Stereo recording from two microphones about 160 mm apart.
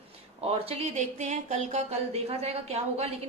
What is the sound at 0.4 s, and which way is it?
Speech, 40° right (ahead or behind).